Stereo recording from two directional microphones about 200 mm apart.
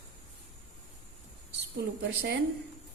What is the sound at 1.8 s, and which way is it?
Speech, 55° right (ahead or behind).